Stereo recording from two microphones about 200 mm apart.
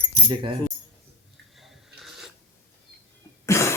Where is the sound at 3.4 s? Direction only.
15° left (ahead or behind).